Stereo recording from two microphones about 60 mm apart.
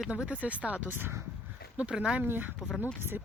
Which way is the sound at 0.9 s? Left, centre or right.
Right.